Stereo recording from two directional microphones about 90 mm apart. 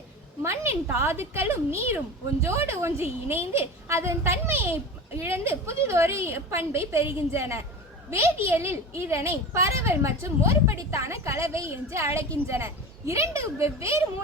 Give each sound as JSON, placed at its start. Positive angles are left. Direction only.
{"t": 0.4, "sound": "a woman's voice", "side_deg": -30}